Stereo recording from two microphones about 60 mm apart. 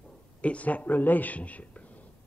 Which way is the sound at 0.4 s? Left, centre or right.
Left.